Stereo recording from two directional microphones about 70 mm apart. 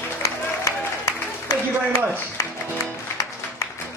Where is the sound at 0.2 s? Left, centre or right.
Left.